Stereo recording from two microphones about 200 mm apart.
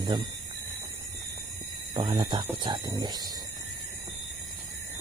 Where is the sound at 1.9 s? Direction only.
20° right (ahead or behind).